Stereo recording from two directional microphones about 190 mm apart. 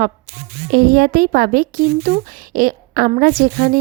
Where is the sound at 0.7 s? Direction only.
50° right (ahead or behind).